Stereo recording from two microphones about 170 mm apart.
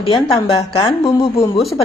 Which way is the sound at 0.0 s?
30° left (ahead or behind).